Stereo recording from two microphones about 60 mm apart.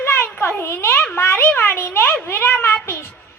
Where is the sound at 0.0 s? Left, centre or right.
Left.